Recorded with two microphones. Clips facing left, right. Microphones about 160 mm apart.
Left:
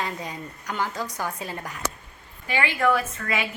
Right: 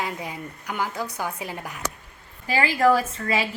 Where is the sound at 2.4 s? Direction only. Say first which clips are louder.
Right 3 dB; 35° right (ahead or behind).